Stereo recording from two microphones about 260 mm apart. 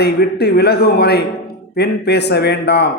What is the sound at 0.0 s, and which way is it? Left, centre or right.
A man's voice, left.